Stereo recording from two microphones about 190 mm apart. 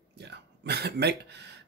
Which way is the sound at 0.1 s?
60° right (ahead or behind).